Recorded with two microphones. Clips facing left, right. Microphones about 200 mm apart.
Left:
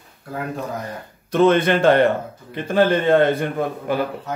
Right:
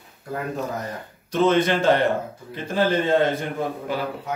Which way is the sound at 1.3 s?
60° left (ahead or behind).